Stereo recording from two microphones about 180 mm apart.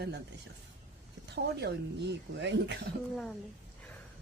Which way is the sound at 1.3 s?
65° right (ahead or behind).